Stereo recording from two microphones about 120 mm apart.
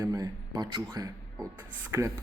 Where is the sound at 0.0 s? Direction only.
25° right (ahead or behind).